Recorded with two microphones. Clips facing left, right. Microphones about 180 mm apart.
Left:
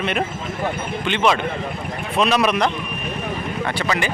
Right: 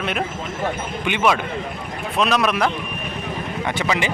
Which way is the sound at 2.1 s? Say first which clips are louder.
Left 2 dB; centre (ahead or behind).